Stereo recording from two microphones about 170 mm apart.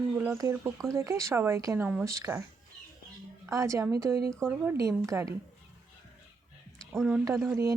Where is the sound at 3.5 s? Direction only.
20° right (ahead or behind).